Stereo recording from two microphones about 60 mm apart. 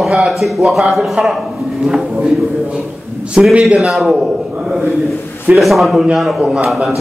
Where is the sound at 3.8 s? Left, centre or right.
Centre.